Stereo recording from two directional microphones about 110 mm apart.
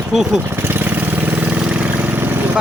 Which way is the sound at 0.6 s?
20° right (ahead or behind).